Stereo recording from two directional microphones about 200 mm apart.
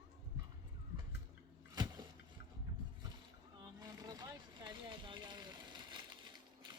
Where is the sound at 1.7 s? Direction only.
20° right (ahead or behind).